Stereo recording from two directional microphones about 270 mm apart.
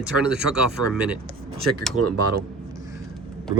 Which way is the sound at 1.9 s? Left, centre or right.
Right.